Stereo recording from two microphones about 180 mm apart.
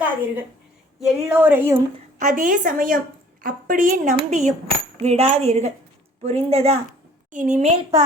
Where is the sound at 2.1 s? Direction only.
45° right (ahead or behind).